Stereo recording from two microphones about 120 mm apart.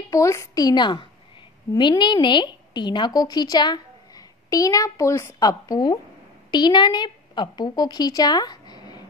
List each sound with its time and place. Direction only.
0.1 s a woman's voice: 25° left (ahead or behind)